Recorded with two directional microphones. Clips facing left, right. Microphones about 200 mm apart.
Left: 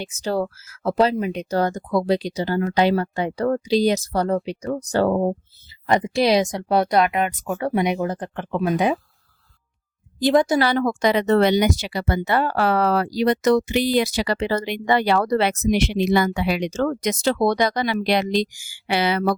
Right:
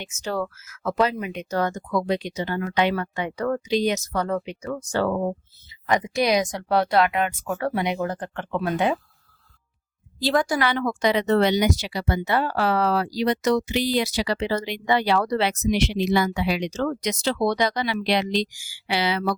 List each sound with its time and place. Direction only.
0.0 s speech: 35° left (ahead or behind); by 9.0 s 15° left (ahead or behind)
10.2 s speech: 20° left (ahead or behind)
10.6 s speech: 40° left (ahead or behind)